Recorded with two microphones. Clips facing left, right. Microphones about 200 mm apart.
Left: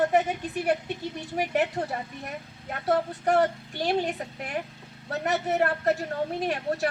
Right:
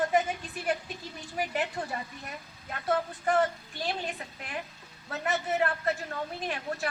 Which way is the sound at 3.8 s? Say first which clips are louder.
Left 8 dB; 65° left (ahead or behind).